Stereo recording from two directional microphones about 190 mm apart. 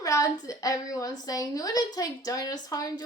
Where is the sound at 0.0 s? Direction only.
20° left (ahead or behind).